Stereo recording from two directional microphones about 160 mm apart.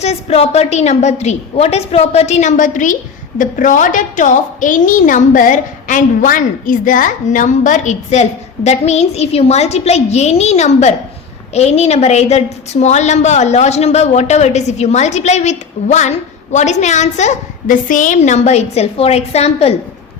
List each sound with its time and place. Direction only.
0.0 s a woman's voice: 40° left (ahead or behind)